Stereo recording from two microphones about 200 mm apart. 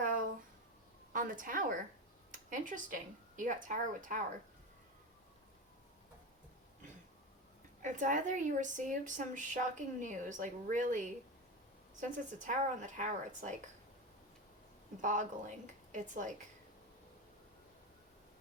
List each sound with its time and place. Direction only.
1.1 s a woman's voice: 40° right (ahead or behind)
7.8 s speech: 40° right (ahead or behind)
15.0 s speech: 40° right (ahead or behind)